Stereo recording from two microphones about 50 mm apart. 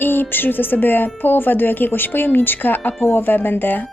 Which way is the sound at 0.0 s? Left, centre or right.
Left.